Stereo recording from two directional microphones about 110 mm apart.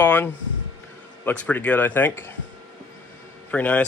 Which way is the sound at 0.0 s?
20° left (ahead or behind).